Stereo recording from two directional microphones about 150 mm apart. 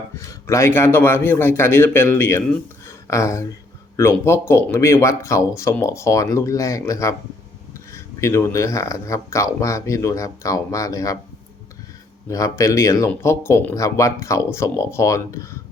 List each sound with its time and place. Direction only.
0.2 s a man's voice: 20° left (ahead or behind)
12.3 s speech: 20° left (ahead or behind)